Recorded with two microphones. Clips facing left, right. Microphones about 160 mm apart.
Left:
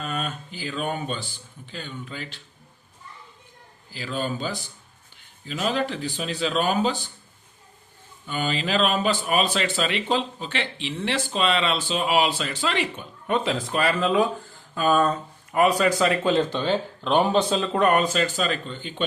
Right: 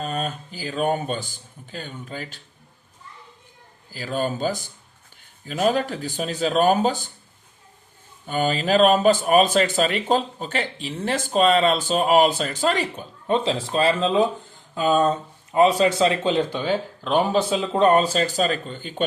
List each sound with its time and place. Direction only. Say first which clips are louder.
0.0 s speech: right 3 dB; 35° right (ahead or behind)
3.9 s speech: right 3 dB; 45° right (ahead or behind)
8.3 s speech: right 5 dB; 45° right (ahead or behind); by 17.6 s 5° right (ahead or behind)
17.6 s speech: right 3 dB; 25° right (ahead or behind); by 19.0 s 45° right (ahead or behind)